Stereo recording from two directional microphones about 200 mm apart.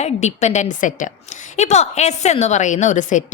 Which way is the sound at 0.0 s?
35° left (ahead or behind).